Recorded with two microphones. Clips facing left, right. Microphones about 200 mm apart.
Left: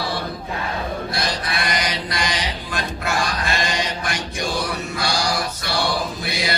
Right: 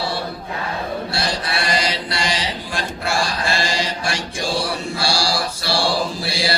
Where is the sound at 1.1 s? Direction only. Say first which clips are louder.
Right 1 dB; 30° right (ahead or behind).